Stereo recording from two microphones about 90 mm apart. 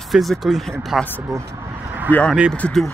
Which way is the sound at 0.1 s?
Centre (ahead or behind).